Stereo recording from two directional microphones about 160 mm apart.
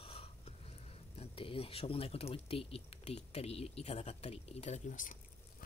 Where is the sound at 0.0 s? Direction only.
35° left (ahead or behind).